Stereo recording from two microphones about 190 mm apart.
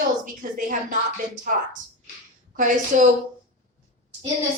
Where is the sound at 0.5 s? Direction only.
45° right (ahead or behind).